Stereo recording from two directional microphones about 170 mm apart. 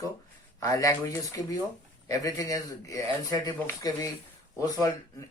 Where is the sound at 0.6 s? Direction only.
20° left (ahead or behind).